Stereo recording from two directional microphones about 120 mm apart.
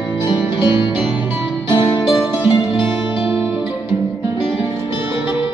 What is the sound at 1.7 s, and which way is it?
Music, 40° left (ahead or behind).